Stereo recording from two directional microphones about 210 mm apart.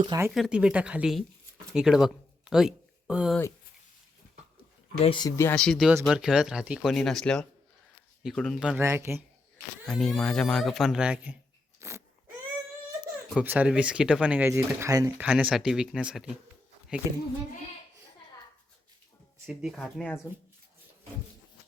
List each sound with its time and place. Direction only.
0.0 s speech: 20° right (ahead or behind)
0.3 s speech: centre (ahead or behind)
5.0 s speech: 20° left (ahead or behind); by 9.2 s 15° right (ahead or behind)
9.8 s speech: 5° left (ahead or behind)
11.8 s crunch: 15° right (ahead or behind)
13.0 s speech: 5° right (ahead or behind)
19.5 s speech: centre (ahead or behind)